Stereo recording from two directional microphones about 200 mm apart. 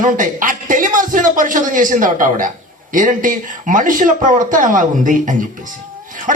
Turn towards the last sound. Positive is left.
turn(degrees=-40)  # may be behind; listen again after turning